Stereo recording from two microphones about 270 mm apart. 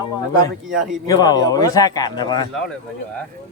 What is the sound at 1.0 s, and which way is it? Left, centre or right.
Speech, centre.